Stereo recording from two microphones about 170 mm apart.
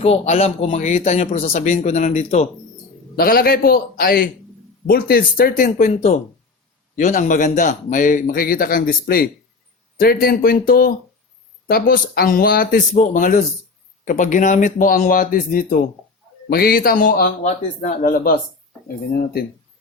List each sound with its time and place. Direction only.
0.0 s speech: 35° left (ahead or behind)
3.2 s speech: 60° left (ahead or behind)